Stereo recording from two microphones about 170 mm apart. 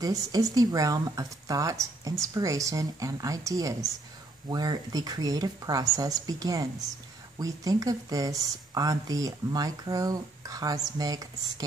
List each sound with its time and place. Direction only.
0.0 s speech: 20° right (ahead or behind)